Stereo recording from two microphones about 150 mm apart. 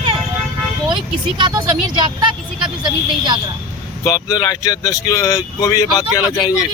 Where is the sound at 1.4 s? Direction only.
25° right (ahead or behind).